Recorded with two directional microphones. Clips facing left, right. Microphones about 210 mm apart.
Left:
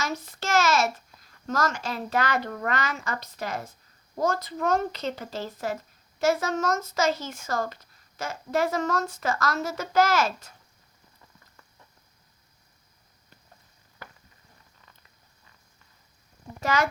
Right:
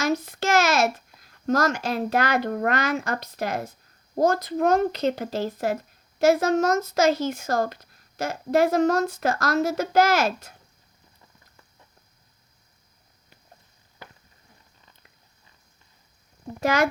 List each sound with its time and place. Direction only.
0.0 s a sound: 60° right (ahead or behind)
1.6 s a woman's voice: 65° right (ahead or behind)
7.4 s speech: 35° right (ahead or behind)
7.7 s a woman's voice: 60° right (ahead or behind)
16.6 s a woman's voice: 60° right (ahead or behind)